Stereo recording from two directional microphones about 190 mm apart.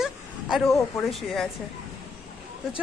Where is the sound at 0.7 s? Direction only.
15° left (ahead or behind).